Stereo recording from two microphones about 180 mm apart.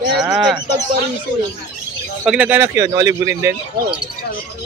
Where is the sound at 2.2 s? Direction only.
5° right (ahead or behind).